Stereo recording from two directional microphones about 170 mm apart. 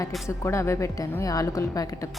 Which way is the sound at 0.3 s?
15° left (ahead or behind).